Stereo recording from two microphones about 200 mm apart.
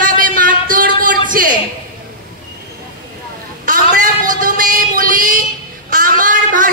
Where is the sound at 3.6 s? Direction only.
40° right (ahead or behind).